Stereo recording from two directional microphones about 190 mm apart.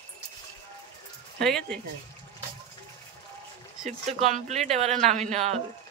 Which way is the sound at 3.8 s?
35° right (ahead or behind).